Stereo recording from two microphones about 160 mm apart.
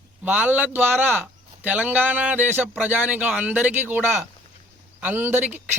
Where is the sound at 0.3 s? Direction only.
10° right (ahead or behind).